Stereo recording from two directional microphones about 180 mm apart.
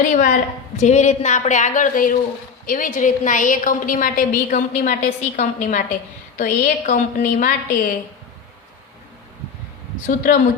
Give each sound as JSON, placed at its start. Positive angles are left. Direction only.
{"t": 0.0, "sound": "a woman's voice", "side_deg": 45}
{"t": 10.1, "sound": "a woman's voice", "side_deg": 50}